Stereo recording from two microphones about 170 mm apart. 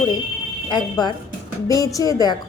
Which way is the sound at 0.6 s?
25° left (ahead or behind).